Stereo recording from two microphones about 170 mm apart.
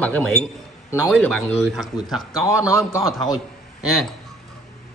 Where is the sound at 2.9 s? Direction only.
20° left (ahead or behind).